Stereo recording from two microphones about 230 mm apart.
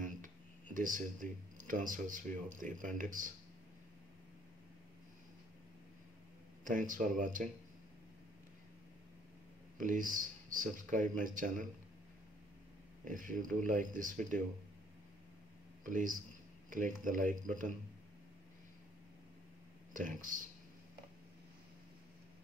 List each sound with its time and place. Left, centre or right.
0.0 s a sound: right
0.7 s speech: right
6.6 s speech: right
9.8 s speech: right
13.0 s speech: right
15.8 s speech: right
19.9 s speech: right